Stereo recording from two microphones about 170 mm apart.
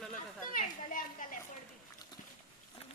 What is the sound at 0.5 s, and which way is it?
Speech, 50° left (ahead or behind).